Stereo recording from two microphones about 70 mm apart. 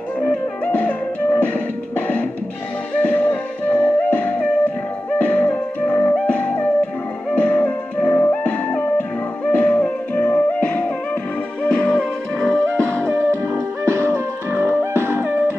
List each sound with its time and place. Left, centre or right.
0.7 s music: left; by 12.6 s centre
12.6 s music: right